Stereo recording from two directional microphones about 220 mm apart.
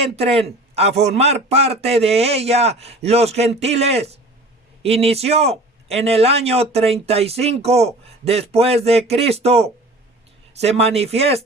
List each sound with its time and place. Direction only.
0.0 s a man's voice: 25° right (ahead or behind)